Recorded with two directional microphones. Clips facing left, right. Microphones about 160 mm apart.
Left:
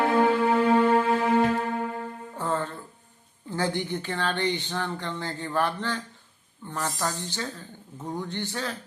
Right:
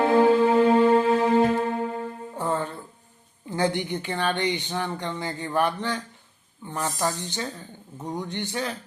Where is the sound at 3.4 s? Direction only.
15° right (ahead or behind).